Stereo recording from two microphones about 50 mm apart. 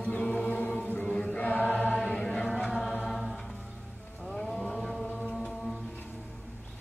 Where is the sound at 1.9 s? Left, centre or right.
Centre.